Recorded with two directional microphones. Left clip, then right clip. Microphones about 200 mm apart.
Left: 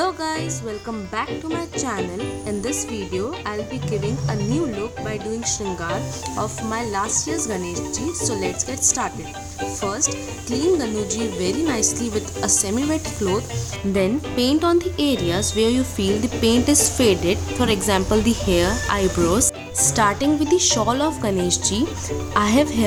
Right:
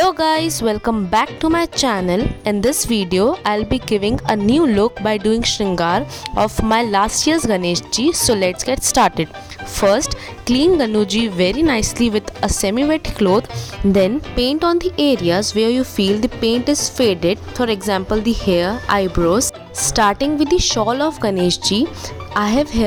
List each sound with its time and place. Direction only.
0.0 s speech: 45° right (ahead or behind)
5.0 s speech: 60° right (ahead or behind)
5.4 s speech: 45° right (ahead or behind)